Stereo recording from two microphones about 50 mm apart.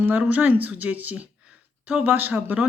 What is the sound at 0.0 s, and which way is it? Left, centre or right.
Speech, right.